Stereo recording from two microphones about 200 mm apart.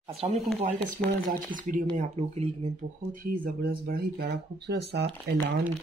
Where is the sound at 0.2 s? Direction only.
35° right (ahead or behind).